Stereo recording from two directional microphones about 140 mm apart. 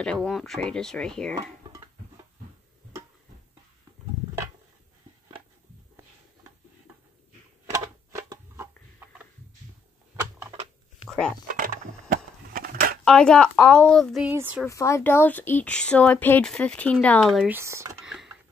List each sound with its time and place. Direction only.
0.0 s speech: 5° left (ahead or behind)
7.7 s a sound: 20° right (ahead or behind)
11.1 s a sound: 5° left (ahead or behind)
11.4 s crushing: 80° right
13.0 s speech: 5° left (ahead or behind)
14.2 s speech: 10° right (ahead or behind)
14.7 s speech: 20° left (ahead or behind); by 17.5 s centre (ahead or behind)
17.5 s speech: 20° right (ahead or behind)
18.0 s a sound: 5° right (ahead or behind)